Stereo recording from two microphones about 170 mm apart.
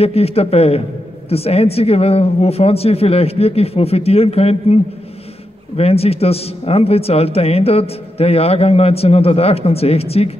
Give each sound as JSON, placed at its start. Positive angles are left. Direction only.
{"t": 0.0, "sound": "a man's voice", "side_deg": 35}
{"t": 5.8, "sound": "a man's voice", "side_deg": 35}